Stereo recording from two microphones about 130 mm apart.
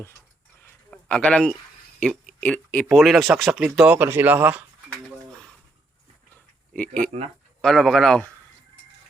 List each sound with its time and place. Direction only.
0.9 s speech: 5° left (ahead or behind)
2.0 s a sound: 5° left (ahead or behind)
2.9 s speech: centre (ahead or behind)
6.8 s speech: 90° right
7.6 s speech: 5° left (ahead or behind)